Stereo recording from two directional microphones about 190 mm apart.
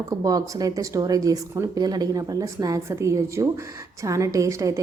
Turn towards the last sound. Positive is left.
turn(degrees=-15)  # may be behind; listen again after turning